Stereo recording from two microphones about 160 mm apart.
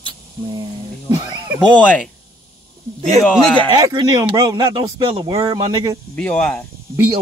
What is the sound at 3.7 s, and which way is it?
Speech, 25° right (ahead or behind).